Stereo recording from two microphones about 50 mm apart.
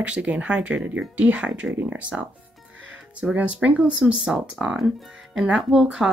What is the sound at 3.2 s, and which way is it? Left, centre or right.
Speech, centre.